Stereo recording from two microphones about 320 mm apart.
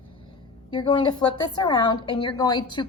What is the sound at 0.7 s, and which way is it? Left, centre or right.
A woman's voice, centre.